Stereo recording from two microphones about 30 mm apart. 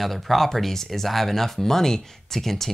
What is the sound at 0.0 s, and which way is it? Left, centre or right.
Speech, centre.